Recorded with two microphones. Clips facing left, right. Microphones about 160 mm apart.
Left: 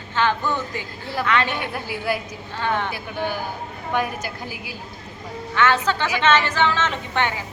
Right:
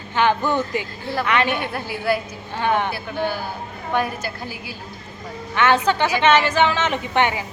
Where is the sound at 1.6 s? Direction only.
15° left (ahead or behind).